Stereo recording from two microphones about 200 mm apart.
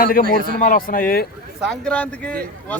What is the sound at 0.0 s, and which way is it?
A man's voice, 45° left (ahead or behind).